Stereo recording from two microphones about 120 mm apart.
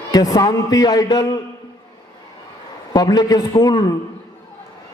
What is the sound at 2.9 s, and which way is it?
A man's voice, 35° left (ahead or behind).